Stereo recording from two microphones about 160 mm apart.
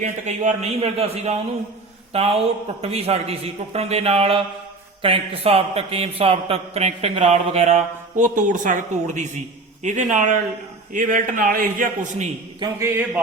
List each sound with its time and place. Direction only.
0.0 s a man's voice: 45° right (ahead or behind)
12.5 s speech: 20° right (ahead or behind)